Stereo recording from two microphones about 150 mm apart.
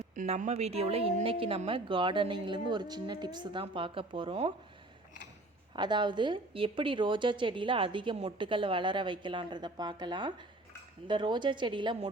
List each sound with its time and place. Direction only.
0.2 s speech: 55° right (ahead or behind); by 4.5 s 35° right (ahead or behind)
5.7 s speech: 30° right (ahead or behind)